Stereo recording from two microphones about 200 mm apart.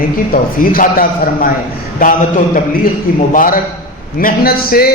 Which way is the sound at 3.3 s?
45° left (ahead or behind).